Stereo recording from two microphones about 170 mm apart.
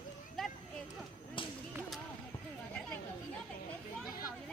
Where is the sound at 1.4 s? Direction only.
30° left (ahead or behind).